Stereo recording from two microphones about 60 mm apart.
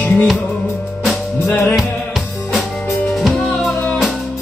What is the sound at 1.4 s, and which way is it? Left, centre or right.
Music, left.